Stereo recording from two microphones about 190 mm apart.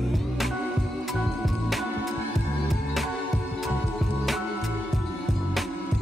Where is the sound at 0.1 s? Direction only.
Centre (ahead or behind).